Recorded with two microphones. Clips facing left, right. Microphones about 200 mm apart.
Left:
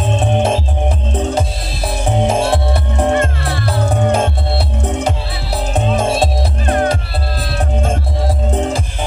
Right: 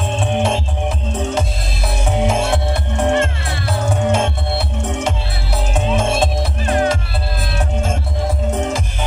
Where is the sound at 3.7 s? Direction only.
35° left (ahead or behind).